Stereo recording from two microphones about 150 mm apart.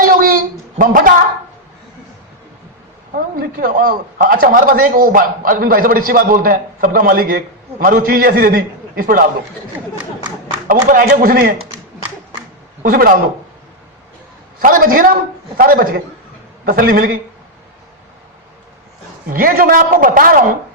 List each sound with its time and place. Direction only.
0.0 s a sound: 70° right (ahead or behind)
3.2 s a man's voice: 75° right (ahead or behind)
10.7 s a man's voice: 70° right (ahead or behind)
12.8 s a man's voice: 70° right (ahead or behind)
14.6 s a man's voice: 70° right (ahead or behind)
19.3 s a man's voice: 70° right (ahead or behind)